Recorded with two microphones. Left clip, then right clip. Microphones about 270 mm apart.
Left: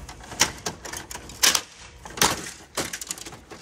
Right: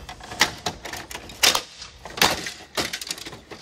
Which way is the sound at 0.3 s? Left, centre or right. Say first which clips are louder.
Right 2 dB; right.